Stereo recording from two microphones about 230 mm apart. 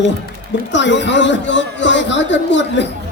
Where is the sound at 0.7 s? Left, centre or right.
Left.